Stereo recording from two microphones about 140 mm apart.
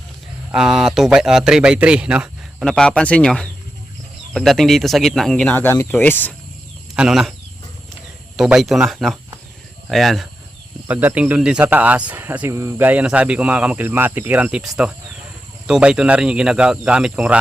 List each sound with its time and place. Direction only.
0.5 s speech: 5° right (ahead or behind); by 6.3 s 10° left (ahead or behind)
6.9 s speech: 5° right (ahead or behind)
8.4 s speech: centre (ahead or behind)
10.8 s speech: 10° right (ahead or behind)